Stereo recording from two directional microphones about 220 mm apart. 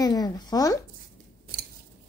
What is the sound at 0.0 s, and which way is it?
Speech, 15° left (ahead or behind).